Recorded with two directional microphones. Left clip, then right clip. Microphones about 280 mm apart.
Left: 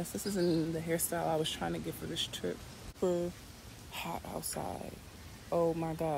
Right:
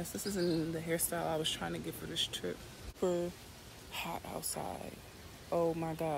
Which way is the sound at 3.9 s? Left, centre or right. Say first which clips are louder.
Left 1 dB; centre.